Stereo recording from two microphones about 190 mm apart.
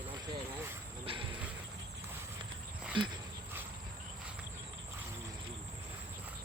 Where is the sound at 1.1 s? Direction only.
30° right (ahead or behind).